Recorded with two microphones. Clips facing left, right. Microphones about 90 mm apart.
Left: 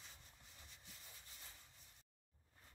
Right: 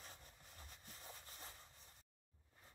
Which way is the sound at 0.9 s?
40° right (ahead or behind).